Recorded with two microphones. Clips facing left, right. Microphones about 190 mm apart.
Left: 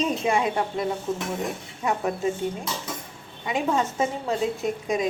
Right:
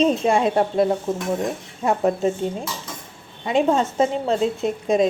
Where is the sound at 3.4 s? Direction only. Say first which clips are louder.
Right 6 dB; 25° right (ahead or behind).